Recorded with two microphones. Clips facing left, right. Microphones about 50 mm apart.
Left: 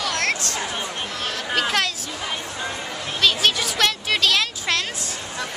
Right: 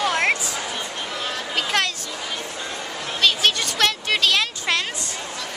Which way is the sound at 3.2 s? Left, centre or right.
Centre.